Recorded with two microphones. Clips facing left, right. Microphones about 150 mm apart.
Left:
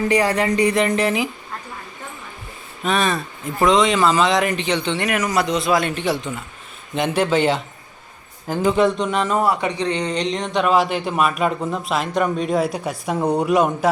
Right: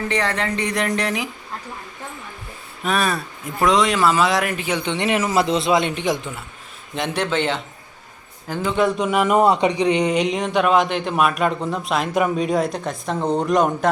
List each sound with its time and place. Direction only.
0.1 s speech: 10° left (ahead or behind)
2.8 s speech: 5° right (ahead or behind)
5.0 s a man's voice: 25° right (ahead or behind); by 6.4 s 10° right (ahead or behind)
6.9 s speech: 5° left (ahead or behind)
8.7 s speech: centre (ahead or behind)